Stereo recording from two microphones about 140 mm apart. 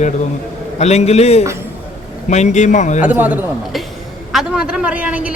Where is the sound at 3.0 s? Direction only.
10° right (ahead or behind).